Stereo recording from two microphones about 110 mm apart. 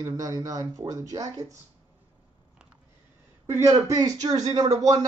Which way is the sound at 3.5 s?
30° right (ahead or behind).